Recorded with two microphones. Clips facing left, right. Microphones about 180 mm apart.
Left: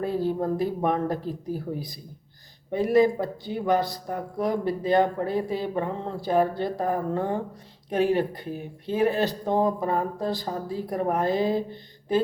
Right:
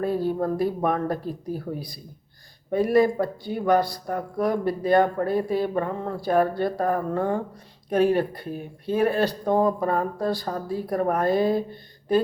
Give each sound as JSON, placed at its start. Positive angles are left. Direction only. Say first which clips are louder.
{"t": 0.3, "sound": "speech", "louder": "right 2 dB", "side_deg": 20}